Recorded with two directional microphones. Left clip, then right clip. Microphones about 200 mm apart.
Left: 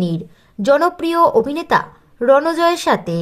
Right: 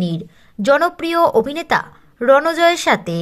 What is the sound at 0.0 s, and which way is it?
A woman's voice, 15° right (ahead or behind).